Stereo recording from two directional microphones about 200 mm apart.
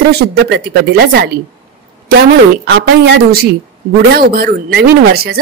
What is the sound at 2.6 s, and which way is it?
A woman's voice, 55° right (ahead or behind).